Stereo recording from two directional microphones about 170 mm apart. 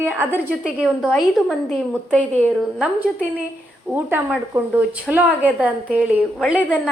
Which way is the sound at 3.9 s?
10° right (ahead or behind).